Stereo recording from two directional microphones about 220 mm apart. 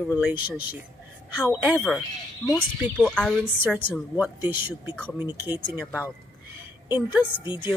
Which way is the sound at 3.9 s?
5° right (ahead or behind).